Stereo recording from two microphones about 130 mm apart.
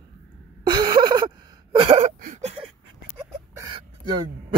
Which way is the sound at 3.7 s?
35° right (ahead or behind).